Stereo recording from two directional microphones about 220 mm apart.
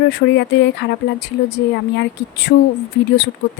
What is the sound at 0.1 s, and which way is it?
A woman's voice, 50° left (ahead or behind).